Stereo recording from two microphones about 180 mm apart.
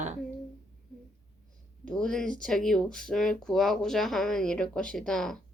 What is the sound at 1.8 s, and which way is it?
Speech, 5° left (ahead or behind).